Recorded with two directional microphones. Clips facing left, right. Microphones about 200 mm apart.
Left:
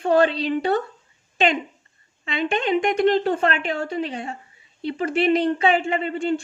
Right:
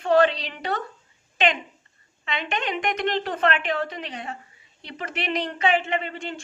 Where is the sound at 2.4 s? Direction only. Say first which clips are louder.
Left 7 dB; 30° left (ahead or behind).